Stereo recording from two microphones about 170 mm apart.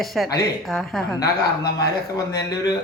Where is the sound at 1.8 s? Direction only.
20° left (ahead or behind).